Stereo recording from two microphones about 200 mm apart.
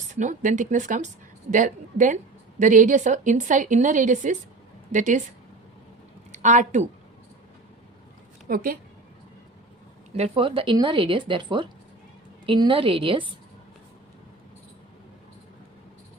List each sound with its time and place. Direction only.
0.2 s a woman's voice: 40° right (ahead or behind)
6.3 s a woman's voice: 35° right (ahead or behind)
8.4 s a woman's voice: 45° right (ahead or behind)
10.2 s a woman's voice: 30° right (ahead or behind)